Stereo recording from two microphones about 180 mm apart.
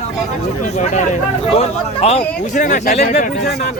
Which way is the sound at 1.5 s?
35° left (ahead or behind).